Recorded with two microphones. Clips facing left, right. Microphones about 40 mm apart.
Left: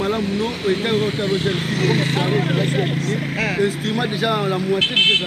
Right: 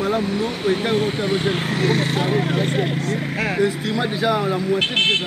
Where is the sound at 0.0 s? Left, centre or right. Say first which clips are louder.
Even; left.